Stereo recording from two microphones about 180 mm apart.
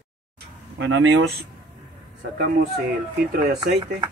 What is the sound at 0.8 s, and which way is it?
Speech, 90° right.